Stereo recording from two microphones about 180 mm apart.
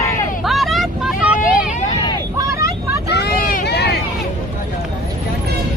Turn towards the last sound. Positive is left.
turn(degrees=65)  # may be behind; listen again after turning